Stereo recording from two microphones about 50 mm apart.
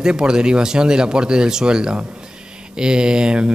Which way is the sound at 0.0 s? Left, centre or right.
Centre.